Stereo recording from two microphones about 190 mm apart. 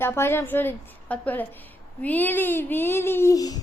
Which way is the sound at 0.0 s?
10° left (ahead or behind).